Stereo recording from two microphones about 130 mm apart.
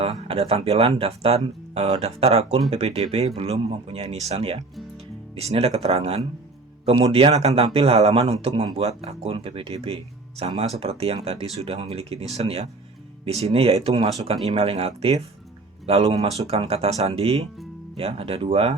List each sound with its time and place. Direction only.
0.0 s a man's voice: 50° right (ahead or behind)